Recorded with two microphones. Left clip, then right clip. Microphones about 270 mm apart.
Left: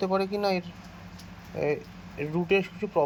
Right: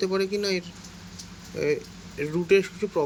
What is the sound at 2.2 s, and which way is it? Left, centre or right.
Speech, centre.